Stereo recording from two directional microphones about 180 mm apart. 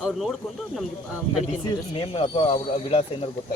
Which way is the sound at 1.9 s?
30° left (ahead or behind).